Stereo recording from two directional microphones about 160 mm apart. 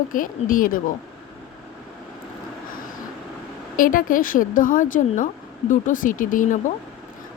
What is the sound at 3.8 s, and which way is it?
A woman's voice, 60° left (ahead or behind).